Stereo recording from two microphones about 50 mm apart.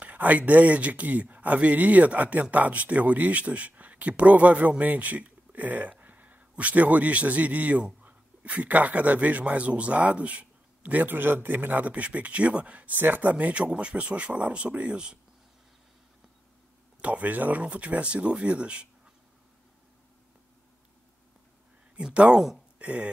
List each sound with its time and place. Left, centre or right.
0.0 s speech: right
17.0 s speech: right
21.9 s speech: right